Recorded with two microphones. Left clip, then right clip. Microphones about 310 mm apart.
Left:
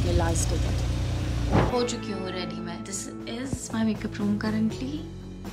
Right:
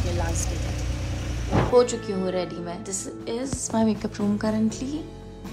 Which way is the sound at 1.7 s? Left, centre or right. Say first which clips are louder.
Right 8 dB; right.